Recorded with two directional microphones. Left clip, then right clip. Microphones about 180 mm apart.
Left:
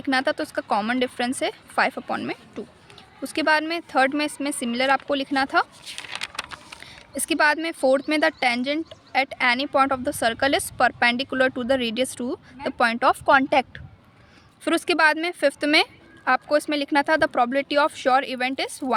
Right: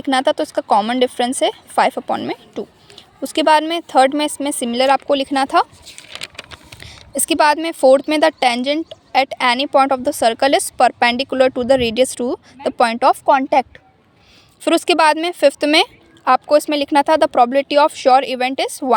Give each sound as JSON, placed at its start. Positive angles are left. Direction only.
{"t": 0.0, "sound": "speech", "side_deg": -30}
{"t": 6.7, "sound": "speech", "side_deg": -30}
{"t": 13.2, "sound": "speech", "side_deg": -15}
{"t": 14.6, "sound": "speech", "side_deg": -30}